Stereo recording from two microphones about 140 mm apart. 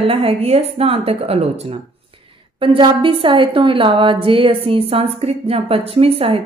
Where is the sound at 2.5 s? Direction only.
40° right (ahead or behind).